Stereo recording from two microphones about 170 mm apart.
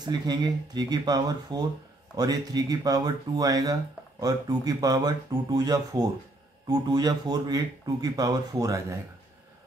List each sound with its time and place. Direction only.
0.0 s a man's voice: 25° right (ahead or behind)